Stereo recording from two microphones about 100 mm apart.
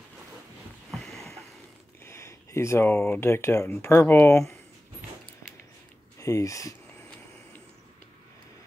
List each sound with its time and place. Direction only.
0.9 s a sound: 5° left (ahead or behind)
2.0 s speech: 25° left (ahead or behind)
6.1 s speech: 30° left (ahead or behind)